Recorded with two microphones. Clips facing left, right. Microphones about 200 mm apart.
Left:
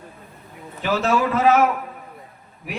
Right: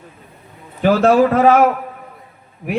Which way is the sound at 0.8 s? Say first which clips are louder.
Right 9 dB; 55° right (ahead or behind).